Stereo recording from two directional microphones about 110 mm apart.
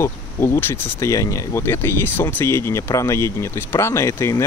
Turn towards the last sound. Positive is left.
turn(degrees=25)  # may be behind; listen again after turning